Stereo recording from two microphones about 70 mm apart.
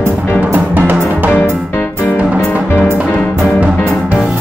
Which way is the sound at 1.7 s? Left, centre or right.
Left.